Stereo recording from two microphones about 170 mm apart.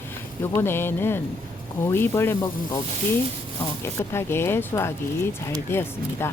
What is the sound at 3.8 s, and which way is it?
Speech, 15° left (ahead or behind).